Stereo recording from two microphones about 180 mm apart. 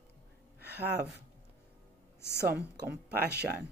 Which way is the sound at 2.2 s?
65° right (ahead or behind).